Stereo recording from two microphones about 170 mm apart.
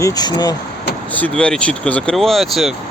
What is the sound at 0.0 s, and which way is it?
Speech, 20° left (ahead or behind).